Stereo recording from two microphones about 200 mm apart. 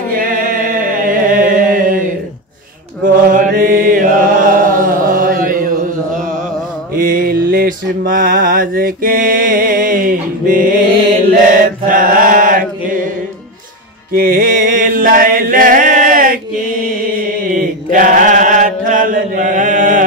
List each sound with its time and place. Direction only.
0.1 s a sound: 45° right (ahead or behind)
3.1 s mantra: 45° right (ahead or behind)
7.0 s mantra: 45° right (ahead or behind)
14.1 s music: 45° right (ahead or behind)
17.9 s chant: 40° right (ahead or behind)